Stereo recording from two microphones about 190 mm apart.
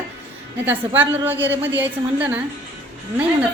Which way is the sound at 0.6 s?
10° right (ahead or behind).